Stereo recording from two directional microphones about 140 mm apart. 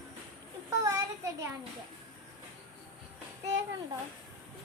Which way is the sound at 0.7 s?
25° right (ahead or behind).